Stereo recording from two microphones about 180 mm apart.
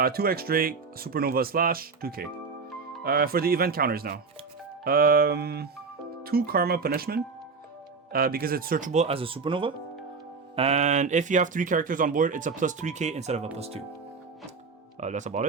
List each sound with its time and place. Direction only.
0.0 s speech: 55° right (ahead or behind); by 13.8 s 35° right (ahead or behind)
15.0 s speech: 40° right (ahead or behind)